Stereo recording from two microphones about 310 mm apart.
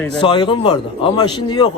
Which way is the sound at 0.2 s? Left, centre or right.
Centre.